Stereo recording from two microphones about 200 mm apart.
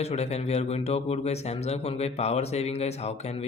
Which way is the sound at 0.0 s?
30° left (ahead or behind).